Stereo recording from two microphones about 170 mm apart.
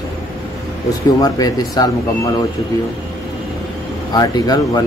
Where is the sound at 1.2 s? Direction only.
20° left (ahead or behind).